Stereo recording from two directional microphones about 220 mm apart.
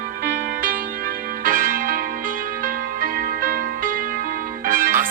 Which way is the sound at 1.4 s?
40° right (ahead or behind).